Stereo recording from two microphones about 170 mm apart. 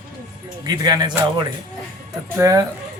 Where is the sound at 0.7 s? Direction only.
25° right (ahead or behind).